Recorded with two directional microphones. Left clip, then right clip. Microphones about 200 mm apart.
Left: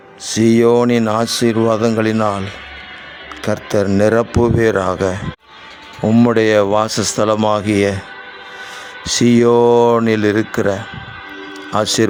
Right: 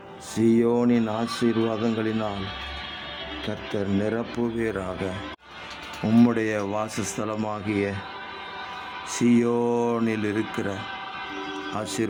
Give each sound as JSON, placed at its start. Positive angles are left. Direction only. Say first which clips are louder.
{"t": 0.3, "sound": "speech", "louder": "left 10 dB", "side_deg": 50}
{"t": 3.4, "sound": "speech", "louder": "left 15 dB", "side_deg": 55}
{"t": 6.1, "sound": "speech", "louder": "left 10 dB", "side_deg": 35}
{"t": 9.0, "sound": "speech", "louder": "left 11 dB", "side_deg": 45}